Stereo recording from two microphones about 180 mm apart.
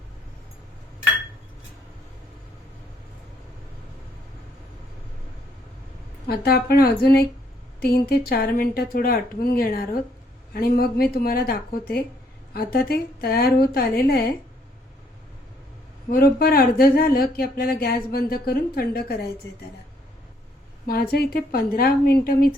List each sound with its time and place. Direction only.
6.2 s speech: 60° left (ahead or behind)
16.0 s speech: 55° left (ahead or behind)
20.8 s speech: 55° left (ahead or behind)